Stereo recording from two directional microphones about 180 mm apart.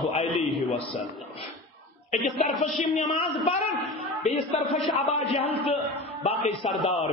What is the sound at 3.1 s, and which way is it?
Speech, 25° left (ahead or behind).